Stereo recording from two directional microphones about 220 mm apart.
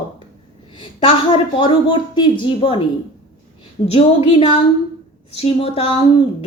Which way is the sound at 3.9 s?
25° left (ahead or behind).